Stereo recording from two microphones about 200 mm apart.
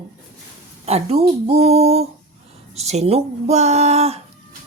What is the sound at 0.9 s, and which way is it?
Speech, 30° right (ahead or behind).